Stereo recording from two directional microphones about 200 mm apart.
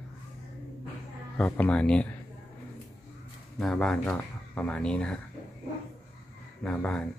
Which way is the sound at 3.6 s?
Centre (ahead or behind).